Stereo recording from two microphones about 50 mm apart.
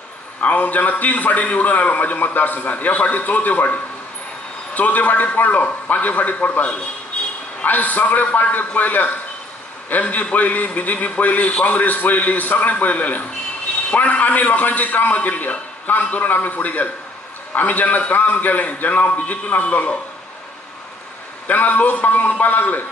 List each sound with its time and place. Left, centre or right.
0.4 s a man's voice: left
21.5 s a man's voice: left